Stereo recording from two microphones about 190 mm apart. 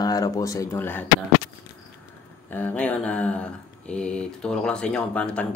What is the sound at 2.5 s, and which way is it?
Speech, 10° left (ahead or behind).